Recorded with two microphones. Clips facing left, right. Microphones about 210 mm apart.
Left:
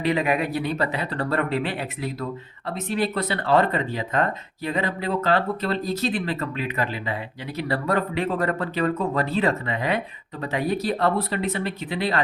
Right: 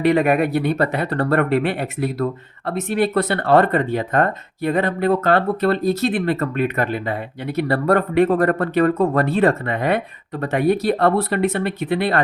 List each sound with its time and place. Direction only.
0.0 s speech: 55° right (ahead or behind)